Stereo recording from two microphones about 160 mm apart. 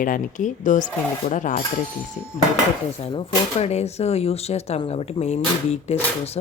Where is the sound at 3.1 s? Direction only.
40° left (ahead or behind).